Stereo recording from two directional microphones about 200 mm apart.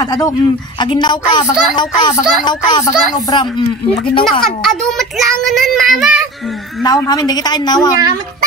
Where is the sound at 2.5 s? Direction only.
20° left (ahead or behind).